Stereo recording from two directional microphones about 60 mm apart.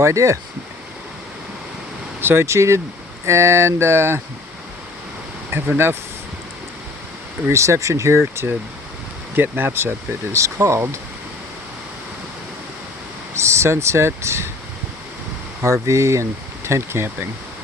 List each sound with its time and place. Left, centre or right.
0.0 s speech: right
2.2 s speech: right
5.7 s speech: right
7.4 s speech: right
9.3 s speech: right
13.3 s speech: right
15.6 s speech: right
16.6 s speech: right